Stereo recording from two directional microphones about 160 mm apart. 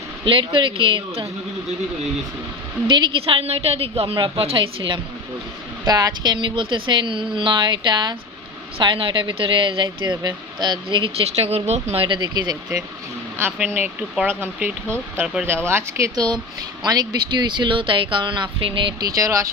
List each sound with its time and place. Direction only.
0.3 s speech: 30° right (ahead or behind)
2.8 s speech: 30° right (ahead or behind)
13.4 s speech: 15° right (ahead or behind)